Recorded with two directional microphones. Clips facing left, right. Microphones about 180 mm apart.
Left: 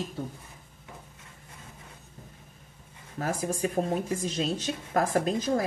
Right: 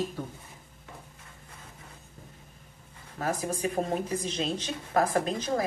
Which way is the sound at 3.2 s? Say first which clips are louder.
Left 1 dB; 45° left (ahead or behind).